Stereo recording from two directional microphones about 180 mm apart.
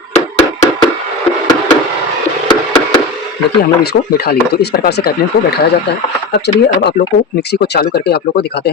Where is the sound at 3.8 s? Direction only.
60° left (ahead or behind).